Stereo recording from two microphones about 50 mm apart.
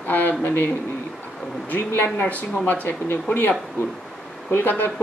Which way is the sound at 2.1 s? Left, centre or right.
Left.